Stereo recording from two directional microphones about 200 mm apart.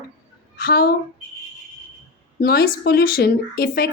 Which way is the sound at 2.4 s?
50° left (ahead or behind).